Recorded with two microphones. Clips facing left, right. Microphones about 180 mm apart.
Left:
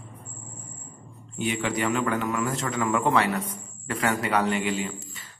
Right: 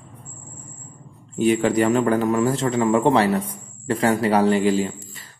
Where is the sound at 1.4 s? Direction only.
40° right (ahead or behind).